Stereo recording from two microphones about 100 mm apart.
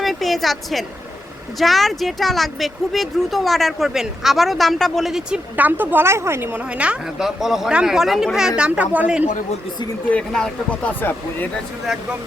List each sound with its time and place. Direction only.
0.0 s speech: centre (ahead or behind)
5.5 s speech: 20° right (ahead or behind)
6.7 s speech: 10° right (ahead or behind)
10.1 s speech: 10° left (ahead or behind)